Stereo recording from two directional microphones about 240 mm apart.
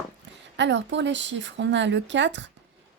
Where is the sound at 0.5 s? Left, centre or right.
Right.